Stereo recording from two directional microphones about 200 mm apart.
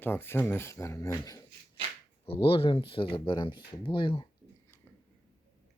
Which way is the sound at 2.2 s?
30° left (ahead or behind).